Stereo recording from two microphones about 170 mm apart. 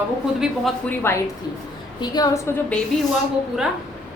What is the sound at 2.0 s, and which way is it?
Speech, 20° left (ahead or behind).